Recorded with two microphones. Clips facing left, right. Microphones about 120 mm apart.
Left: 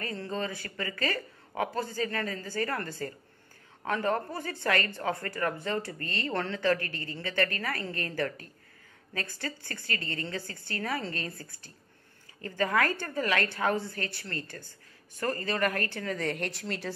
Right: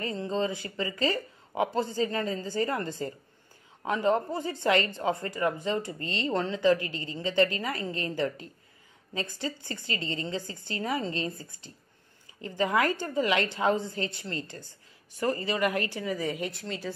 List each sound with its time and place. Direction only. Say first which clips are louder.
0.0 s a woman's voice: right 4 dB; 20° right (ahead or behind); by 16.9 s centre (ahead or behind)